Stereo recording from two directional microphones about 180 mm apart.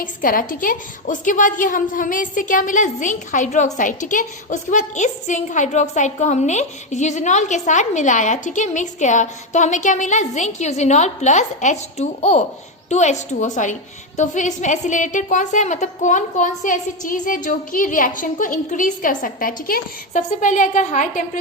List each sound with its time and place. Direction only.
0.0 s a woman's voice: 50° left (ahead or behind)